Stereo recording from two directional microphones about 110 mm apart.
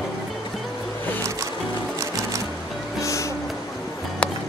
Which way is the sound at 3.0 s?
30° left (ahead or behind).